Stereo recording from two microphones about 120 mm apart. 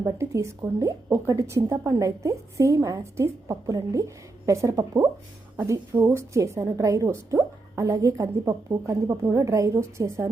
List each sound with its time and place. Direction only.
0.0 s a woman's voice: 25° right (ahead or behind)